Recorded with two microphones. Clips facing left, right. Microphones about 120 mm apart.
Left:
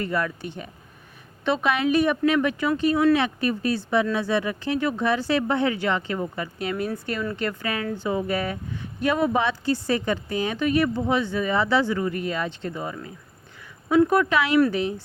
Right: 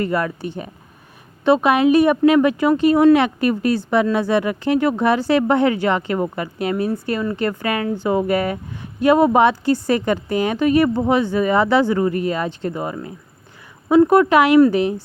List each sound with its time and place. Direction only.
0.0 s a woman's voice: 45° right (ahead or behind)
5.7 s speech: 45° right (ahead or behind)
9.0 s speech: 40° right (ahead or behind)
14.1 s speech: 45° right (ahead or behind)